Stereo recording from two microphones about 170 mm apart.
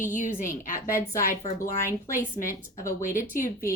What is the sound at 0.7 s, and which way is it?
A woman's voice, 15° left (ahead or behind).